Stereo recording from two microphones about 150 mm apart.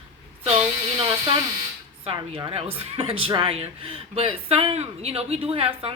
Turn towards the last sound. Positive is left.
turn(degrees=-40)  # may be behind; listen again after turning